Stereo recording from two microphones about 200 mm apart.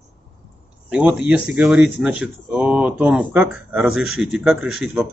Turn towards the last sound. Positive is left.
turn(degrees=-5)  # may be behind; listen again after turning